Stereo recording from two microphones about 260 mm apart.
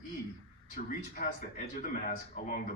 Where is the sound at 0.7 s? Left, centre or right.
Left.